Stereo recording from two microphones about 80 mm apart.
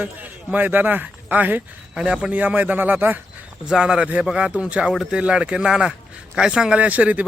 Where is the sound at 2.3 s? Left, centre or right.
Centre.